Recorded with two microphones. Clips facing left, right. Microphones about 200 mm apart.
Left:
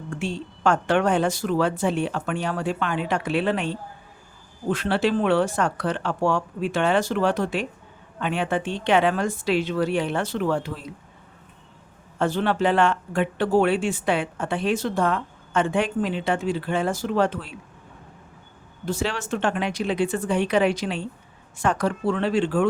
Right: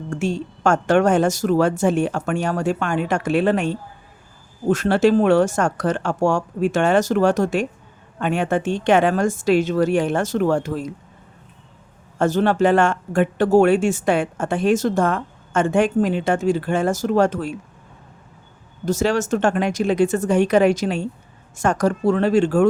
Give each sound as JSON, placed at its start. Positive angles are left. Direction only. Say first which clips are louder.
{"t": 0.1, "sound": "speech", "louder": "right 6 dB", "side_deg": -45}
{"t": 12.2, "sound": "speech", "louder": "right 5 dB", "side_deg": -45}
{"t": 18.9, "sound": "speech", "louder": "right 7 dB", "side_deg": -45}